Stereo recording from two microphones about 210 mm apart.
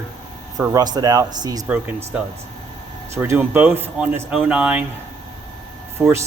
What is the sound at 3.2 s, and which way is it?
Speech, 10° right (ahead or behind).